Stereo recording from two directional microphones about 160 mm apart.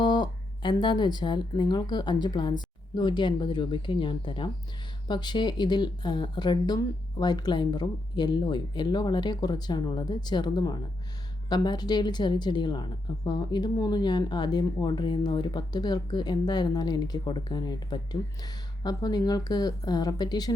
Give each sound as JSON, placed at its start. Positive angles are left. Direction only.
{"t": 0.0, "sound": "a woman's voice", "side_deg": 30}